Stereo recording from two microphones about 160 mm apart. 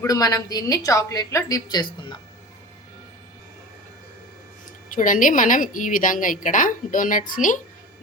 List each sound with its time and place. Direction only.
0.0 s a woman's voice: 20° left (ahead or behind)
4.9 s a woman's voice: 55° left (ahead or behind)